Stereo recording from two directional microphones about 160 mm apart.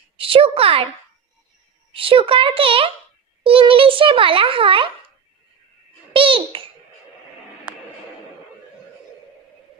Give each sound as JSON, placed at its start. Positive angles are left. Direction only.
{"t": 0.2, "sound": "a child's voice", "side_deg": -35}
{"t": 1.9, "sound": "a child's voice", "side_deg": -35}
{"t": 6.1, "sound": "a child's voice", "side_deg": -35}